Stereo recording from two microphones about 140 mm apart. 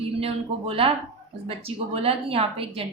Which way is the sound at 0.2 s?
45° right (ahead or behind).